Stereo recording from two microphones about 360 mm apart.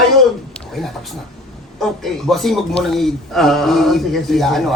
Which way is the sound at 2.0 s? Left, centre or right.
Centre.